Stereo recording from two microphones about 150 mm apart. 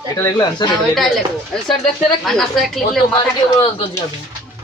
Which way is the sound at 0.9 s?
Centre (ahead or behind).